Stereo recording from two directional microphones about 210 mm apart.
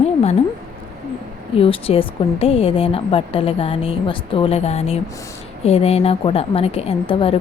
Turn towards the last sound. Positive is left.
turn(degrees=25)  # may be behind; listen again after turning